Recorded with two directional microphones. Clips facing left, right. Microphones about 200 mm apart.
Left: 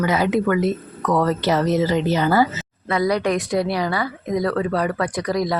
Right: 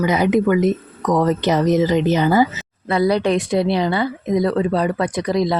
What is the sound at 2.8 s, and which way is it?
A woman's voice, 30° right (ahead or behind).